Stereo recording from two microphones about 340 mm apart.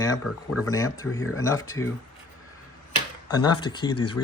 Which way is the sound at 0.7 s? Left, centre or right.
Centre.